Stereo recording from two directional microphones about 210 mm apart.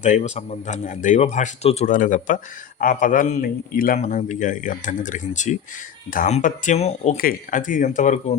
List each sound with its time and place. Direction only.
0.0 s a man's voice: 30° left (ahead or behind)